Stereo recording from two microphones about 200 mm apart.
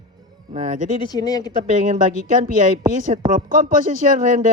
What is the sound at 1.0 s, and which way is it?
Speech, 20° left (ahead or behind).